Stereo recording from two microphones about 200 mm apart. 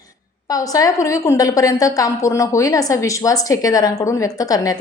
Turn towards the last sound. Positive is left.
turn(degrees=20)  # may be behind; listen again after turning